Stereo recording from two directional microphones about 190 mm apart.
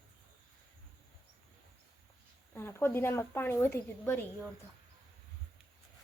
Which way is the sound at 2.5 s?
10° left (ahead or behind).